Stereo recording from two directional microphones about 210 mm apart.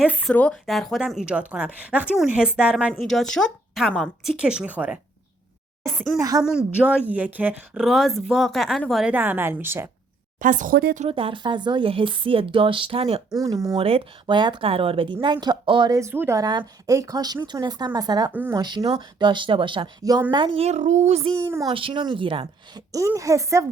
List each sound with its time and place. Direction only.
0.0 s a woman's voice: 5° right (ahead or behind)
6.1 s speech: 15° right (ahead or behind)
6.4 s a woman's voice: 5° right (ahead or behind)
10.4 s speech: 40° right (ahead or behind)
11.1 s speech: 25° right (ahead or behind)
13.3 s speech: 15° right (ahead or behind)